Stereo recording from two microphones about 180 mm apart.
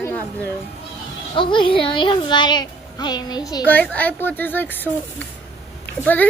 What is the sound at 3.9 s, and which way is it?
Speech, 10° left (ahead or behind).